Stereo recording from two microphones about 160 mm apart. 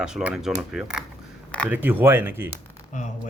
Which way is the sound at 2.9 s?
55° left (ahead or behind).